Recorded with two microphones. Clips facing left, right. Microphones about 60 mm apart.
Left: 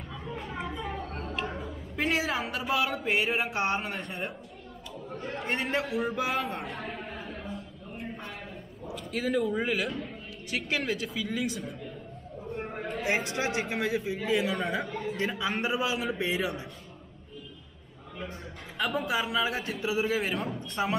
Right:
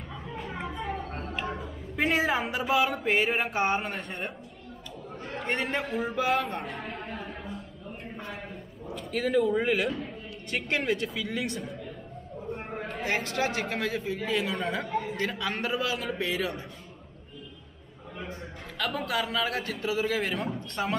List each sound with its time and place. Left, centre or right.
0.4 s a sound: centre
5.2 s a man's voice: centre
7.5 s a sound: centre
8.8 s a man's voice: centre
13.0 s a man's voice: centre
19.0 s a man's voice: centre